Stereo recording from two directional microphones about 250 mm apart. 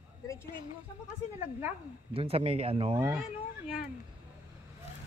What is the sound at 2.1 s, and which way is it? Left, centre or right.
Speech, right.